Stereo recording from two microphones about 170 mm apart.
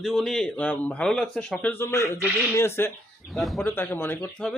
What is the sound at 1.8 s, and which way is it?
Speech, 15° left (ahead or behind).